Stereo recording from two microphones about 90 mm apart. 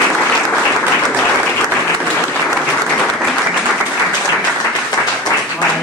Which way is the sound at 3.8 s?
10° left (ahead or behind).